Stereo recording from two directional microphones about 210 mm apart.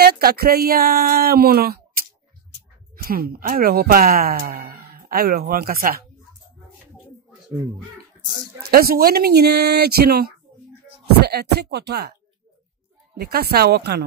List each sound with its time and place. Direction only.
0.0 s speech: 50° right (ahead or behind)
8.6 s speech: 45° right (ahead or behind)
13.2 s speech: 50° right (ahead or behind)